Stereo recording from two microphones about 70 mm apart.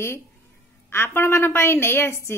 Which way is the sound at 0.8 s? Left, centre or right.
Left.